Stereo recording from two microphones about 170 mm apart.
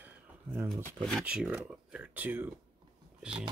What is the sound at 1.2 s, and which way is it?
Speech, 5° right (ahead or behind).